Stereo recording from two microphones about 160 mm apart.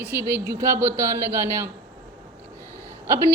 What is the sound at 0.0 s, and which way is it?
Speech, 15° right (ahead or behind).